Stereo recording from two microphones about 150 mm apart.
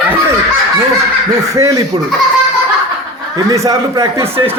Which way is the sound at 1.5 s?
20° right (ahead or behind).